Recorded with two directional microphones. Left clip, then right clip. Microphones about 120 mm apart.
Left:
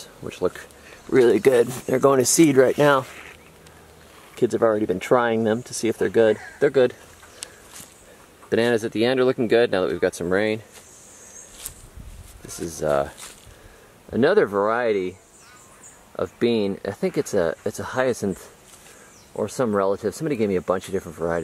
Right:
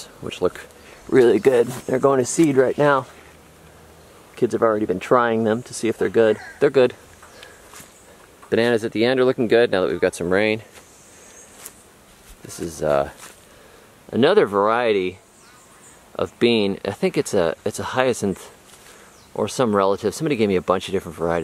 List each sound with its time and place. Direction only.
0.0 s speech: 5° right (ahead or behind); by 3.1 s 20° left (ahead or behind)
4.4 s speech: 10° left (ahead or behind)
6.6 s speech: 5° right (ahead or behind)
8.5 s speech: centre (ahead or behind)
12.4 s speech: centre (ahead or behind)
16.2 s speech: 10° right (ahead or behind)